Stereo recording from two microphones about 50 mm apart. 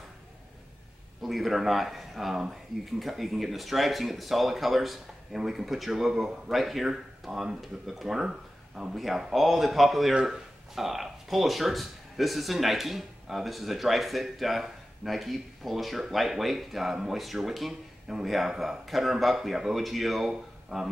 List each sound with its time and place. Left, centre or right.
1.2 s speech: centre